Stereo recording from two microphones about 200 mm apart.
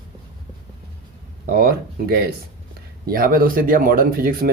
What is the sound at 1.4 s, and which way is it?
Speech, 50° right (ahead or behind).